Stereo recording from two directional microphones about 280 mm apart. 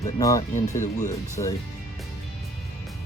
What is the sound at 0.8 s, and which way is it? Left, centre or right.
Speech, left.